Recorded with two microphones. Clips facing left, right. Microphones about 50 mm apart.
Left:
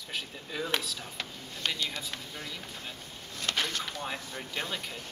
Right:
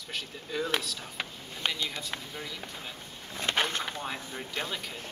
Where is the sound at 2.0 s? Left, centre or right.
Centre.